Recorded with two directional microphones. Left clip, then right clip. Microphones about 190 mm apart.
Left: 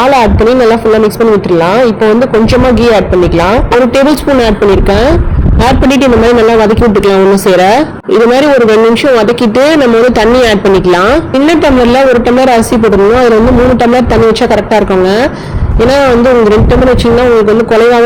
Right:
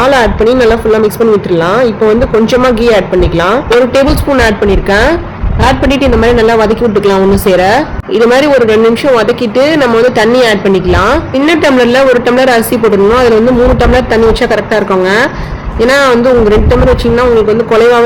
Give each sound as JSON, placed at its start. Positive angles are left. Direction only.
{"t": 0.0, "sound": "a man's voice", "side_deg": 10}
{"t": 2.5, "sound": "a man's voice", "side_deg": 15}
{"t": 14.7, "sound": "a man's voice", "side_deg": 10}
{"t": 17.7, "sound": "a man's voice", "side_deg": 15}